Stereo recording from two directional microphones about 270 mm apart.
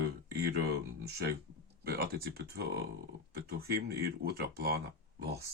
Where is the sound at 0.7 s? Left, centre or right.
Right.